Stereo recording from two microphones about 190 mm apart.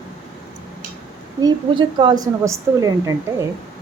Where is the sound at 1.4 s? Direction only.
25° right (ahead or behind).